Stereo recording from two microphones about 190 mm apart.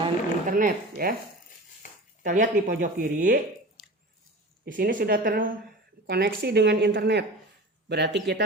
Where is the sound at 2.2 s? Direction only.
45° right (ahead or behind).